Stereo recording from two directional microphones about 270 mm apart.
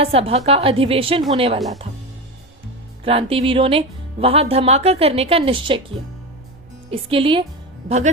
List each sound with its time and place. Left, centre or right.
0.0 s speech: right
3.0 s speech: right